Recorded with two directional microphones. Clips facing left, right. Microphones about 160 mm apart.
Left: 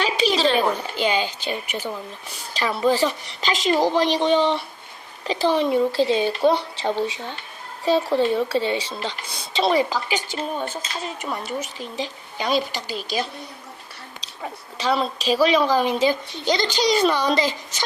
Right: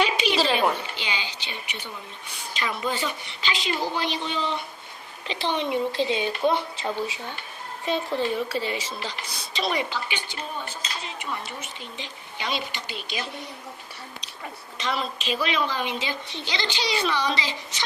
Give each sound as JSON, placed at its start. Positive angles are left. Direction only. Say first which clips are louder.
{"t": 0.3, "sound": "a sound", "louder": "left 3 dB", "side_deg": -5}
{"t": 0.8, "sound": "speech", "louder": "left 10 dB", "side_deg": 45}
{"t": 2.5, "sound": "a woman's voice", "louder": "left 8 dB", "side_deg": 35}
{"t": 14.8, "sound": "a woman's voice", "louder": "left 6 dB", "side_deg": 35}